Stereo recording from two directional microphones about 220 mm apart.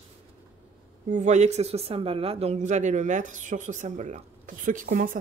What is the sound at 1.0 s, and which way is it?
Speech, 35° right (ahead or behind).